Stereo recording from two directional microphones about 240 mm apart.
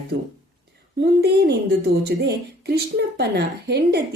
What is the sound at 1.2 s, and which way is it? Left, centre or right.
A woman's voice, right.